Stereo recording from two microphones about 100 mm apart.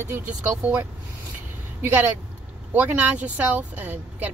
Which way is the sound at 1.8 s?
20° right (ahead or behind).